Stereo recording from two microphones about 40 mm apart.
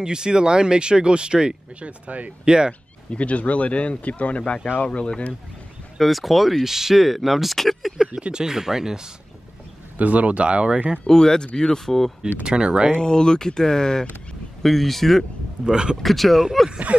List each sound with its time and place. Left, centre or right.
0.0 s speech: centre; by 2.3 s right
2.4 s speech: centre
3.1 s speech: left
5.9 s speech: centre
8.1 s speech: right
9.9 s speech: right
11.1 s speech: centre
12.4 s speech: right
12.9 s speech: centre
15.6 s speech: right
16.0 s speech: centre